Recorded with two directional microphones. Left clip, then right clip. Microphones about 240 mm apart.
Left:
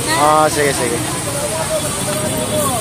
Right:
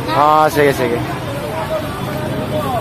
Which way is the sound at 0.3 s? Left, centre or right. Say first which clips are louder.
Right 2 dB; centre.